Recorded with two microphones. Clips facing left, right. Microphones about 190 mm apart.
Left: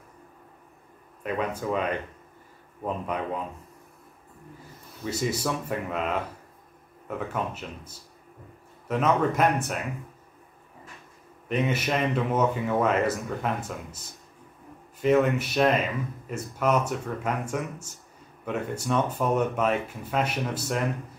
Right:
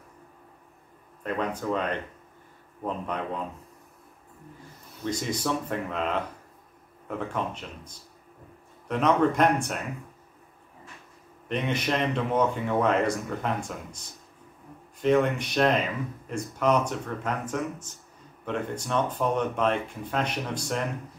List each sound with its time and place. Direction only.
1.2 s speech: 10° left (ahead or behind)
5.0 s speech: 5° left (ahead or behind)
11.4 s speech: 5° left (ahead or behind)